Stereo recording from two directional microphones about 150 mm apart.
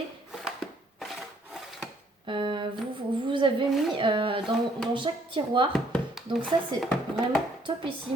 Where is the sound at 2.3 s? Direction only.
35° right (ahead or behind).